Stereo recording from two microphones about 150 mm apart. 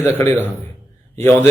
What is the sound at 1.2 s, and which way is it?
Speech, 15° left (ahead or behind).